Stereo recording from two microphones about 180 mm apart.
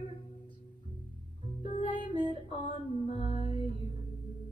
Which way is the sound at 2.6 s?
35° left (ahead or behind).